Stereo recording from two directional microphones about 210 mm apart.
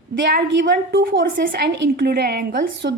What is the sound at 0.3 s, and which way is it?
A woman's voice, 50° right (ahead or behind).